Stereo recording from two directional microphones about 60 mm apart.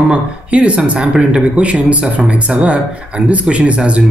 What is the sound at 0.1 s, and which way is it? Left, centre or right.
Speech, right.